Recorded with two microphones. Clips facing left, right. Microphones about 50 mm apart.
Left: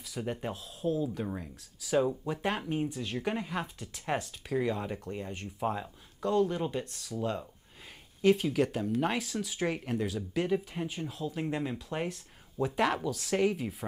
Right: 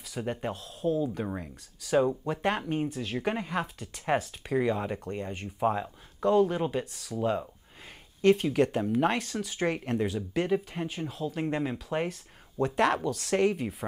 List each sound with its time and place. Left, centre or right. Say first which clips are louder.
0.2 s speech: right 3 dB; centre
1.2 s speech: right 2 dB; centre
2.0 s speech: right 3 dB; centre
8.2 s speech: right 3 dB; centre
9.9 s speech: right 3 dB; centre
10.3 s speech: right 1 dB; centre